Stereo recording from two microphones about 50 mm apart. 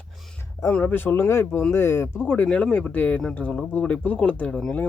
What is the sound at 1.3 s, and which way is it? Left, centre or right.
Speech, left.